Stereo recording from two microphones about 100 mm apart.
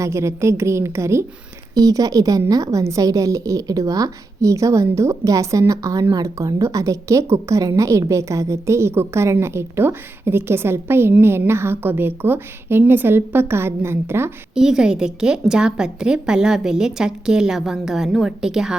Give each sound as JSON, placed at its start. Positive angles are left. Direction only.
{"t": 0.0, "sound": "a woman's voice", "side_deg": -30}
{"t": 14.5, "sound": "a woman's voice", "side_deg": -5}